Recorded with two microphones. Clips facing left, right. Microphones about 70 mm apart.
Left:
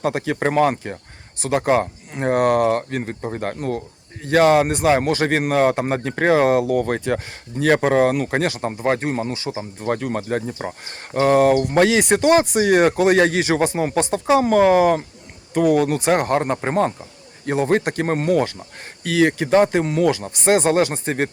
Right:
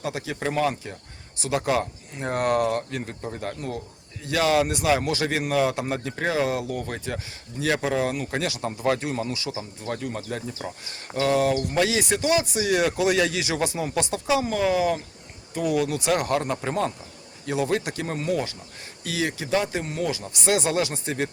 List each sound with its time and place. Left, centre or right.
0.0 s speech: left
3.4 s speech: left
8.3 s speech: left
9.8 s speech: left
14.4 s speech: left
20.2 s speech: left